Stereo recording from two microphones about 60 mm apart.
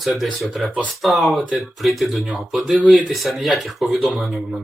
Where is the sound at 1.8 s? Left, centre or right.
Centre.